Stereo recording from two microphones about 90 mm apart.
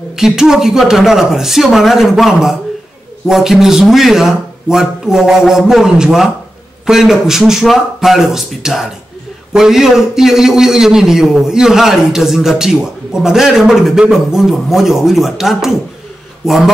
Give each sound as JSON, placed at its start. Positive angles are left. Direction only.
{"t": 0.1, "sound": "a man's voice", "side_deg": -5}